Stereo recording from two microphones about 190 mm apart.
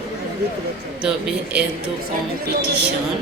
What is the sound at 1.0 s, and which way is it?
Speech, 5° right (ahead or behind).